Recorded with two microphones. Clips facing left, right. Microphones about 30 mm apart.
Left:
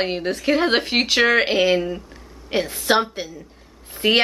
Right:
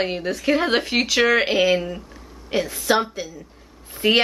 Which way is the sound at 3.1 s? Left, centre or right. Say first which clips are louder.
Left 1 dB; left.